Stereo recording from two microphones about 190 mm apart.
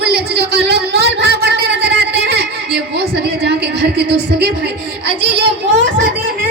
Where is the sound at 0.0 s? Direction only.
60° right (ahead or behind).